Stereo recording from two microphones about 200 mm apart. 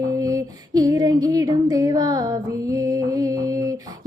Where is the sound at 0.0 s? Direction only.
15° right (ahead or behind).